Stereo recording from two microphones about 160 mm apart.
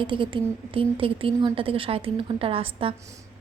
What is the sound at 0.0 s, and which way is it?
Speech, 30° right (ahead or behind).